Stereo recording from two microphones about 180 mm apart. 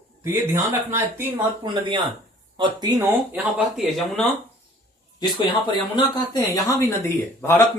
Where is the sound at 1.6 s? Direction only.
25° right (ahead or behind).